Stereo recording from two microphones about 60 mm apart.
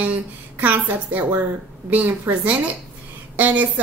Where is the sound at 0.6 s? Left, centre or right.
Right.